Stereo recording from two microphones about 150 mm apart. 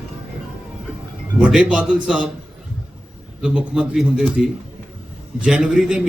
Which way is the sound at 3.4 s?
5° right (ahead or behind).